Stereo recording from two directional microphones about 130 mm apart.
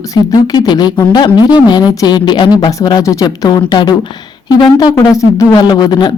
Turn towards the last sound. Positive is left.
turn(degrees=35)  # may be behind; listen again after turning